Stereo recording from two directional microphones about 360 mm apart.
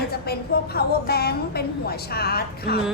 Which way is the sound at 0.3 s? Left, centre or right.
Left.